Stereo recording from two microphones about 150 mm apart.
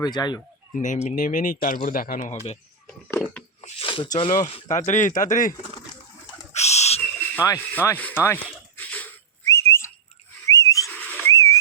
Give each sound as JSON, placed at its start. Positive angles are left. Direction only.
{"t": 0.0, "sound": "speech", "side_deg": 30}
{"t": 0.8, "sound": "speech", "side_deg": 55}
{"t": 3.6, "sound": "a sound", "side_deg": 45}
{"t": 3.8, "sound": "a sound", "side_deg": 35}
{"t": 4.2, "sound": "speech", "side_deg": 35}
{"t": 4.9, "sound": "speech", "side_deg": 60}
{"t": 6.5, "sound": "owl", "side_deg": 45}
{"t": 7.2, "sound": "rub", "side_deg": 15}
{"t": 8.8, "sound": "whistling", "side_deg": 10}
{"t": 10.4, "sound": "whistle", "side_deg": 20}
{"t": 10.9, "sound": "whistling", "side_deg": 10}